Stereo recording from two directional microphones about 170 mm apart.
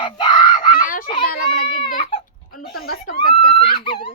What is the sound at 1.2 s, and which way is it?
A child's voice, 60° left (ahead or behind).